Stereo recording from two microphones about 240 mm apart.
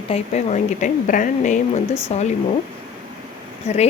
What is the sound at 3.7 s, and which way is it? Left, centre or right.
Speech, left.